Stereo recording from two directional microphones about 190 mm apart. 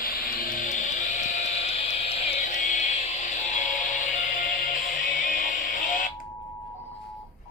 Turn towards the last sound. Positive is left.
turn(degrees=45)  # may be behind; listen again after turning